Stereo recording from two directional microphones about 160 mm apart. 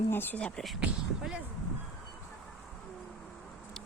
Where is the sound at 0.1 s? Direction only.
15° left (ahead or behind); by 1.4 s 5° right (ahead or behind).